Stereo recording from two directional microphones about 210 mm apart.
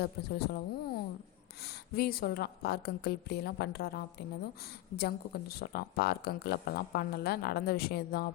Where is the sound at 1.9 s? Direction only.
45° left (ahead or behind).